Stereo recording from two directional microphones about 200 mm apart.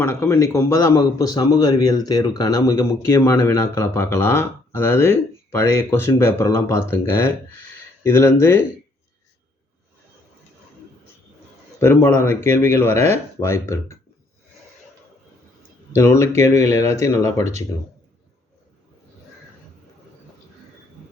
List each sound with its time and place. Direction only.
0.0 s speech: 15° left (ahead or behind)
11.8 s speech: 10° left (ahead or behind)
16.0 s speech: 15° left (ahead or behind)